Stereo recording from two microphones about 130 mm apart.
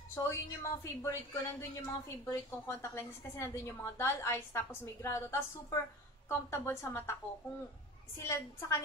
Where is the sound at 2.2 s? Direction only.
20° left (ahead or behind).